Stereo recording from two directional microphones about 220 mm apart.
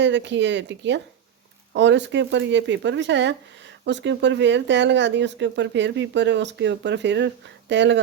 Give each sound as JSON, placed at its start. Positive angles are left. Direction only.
{"t": 0.0, "sound": "speech", "side_deg": -55}